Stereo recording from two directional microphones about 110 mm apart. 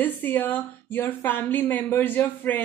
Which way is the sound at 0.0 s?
15° left (ahead or behind).